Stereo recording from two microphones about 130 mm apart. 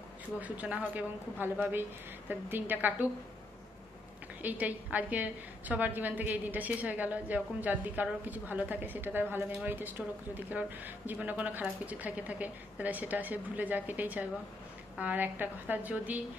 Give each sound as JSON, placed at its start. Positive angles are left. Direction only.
{"t": 0.4, "sound": "a woman's voice", "side_deg": -10}
{"t": 4.4, "sound": "a woman's voice", "side_deg": -10}